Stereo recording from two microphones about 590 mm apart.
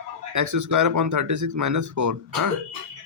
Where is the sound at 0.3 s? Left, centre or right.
Right.